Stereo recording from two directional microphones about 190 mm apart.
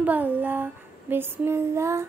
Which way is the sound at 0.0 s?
10° right (ahead or behind).